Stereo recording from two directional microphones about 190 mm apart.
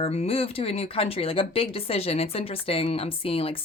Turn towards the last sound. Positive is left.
turn(degrees=30)  # may be behind; listen again after turning